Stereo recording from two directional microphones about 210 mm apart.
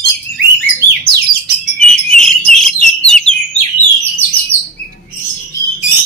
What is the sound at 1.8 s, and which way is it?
Bird, 5° left (ahead or behind).